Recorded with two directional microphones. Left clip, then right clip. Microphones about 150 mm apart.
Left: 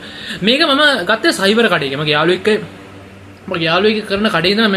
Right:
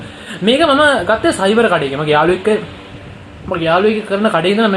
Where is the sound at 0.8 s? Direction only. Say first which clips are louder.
Right 1 dB; 45° left (ahead or behind).